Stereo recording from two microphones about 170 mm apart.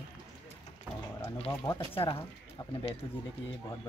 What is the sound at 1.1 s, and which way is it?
Speech, 30° left (ahead or behind).